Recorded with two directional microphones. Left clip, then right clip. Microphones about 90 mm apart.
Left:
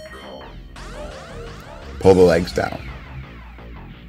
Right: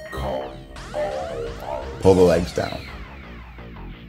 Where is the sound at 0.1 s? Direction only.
45° right (ahead or behind).